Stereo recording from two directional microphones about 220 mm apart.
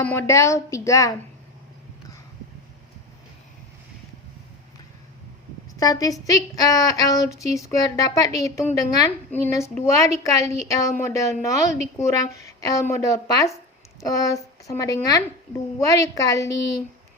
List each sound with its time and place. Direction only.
0.0 s speech: 10° left (ahead or behind)
5.8 s speech: 15° left (ahead or behind)